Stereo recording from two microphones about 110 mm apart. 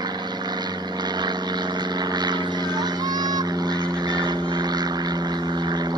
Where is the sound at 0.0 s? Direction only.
40° right (ahead or behind).